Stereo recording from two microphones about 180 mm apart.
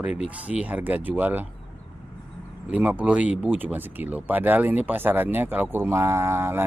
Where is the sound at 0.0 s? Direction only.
5° right (ahead or behind).